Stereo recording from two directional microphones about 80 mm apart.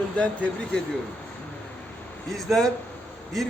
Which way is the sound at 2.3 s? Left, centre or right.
Centre.